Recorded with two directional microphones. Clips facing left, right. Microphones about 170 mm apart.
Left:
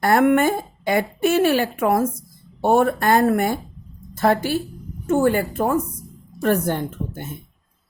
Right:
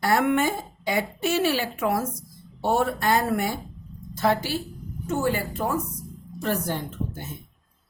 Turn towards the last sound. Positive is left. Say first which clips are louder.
# left 4 dB
turn(degrees=55)  # may be behind; listen again after turning